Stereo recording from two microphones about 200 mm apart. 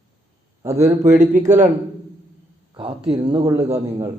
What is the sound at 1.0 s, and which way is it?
Speech, 40° right (ahead or behind).